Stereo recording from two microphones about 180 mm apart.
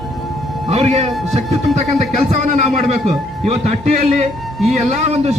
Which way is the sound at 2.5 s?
35° right (ahead or behind).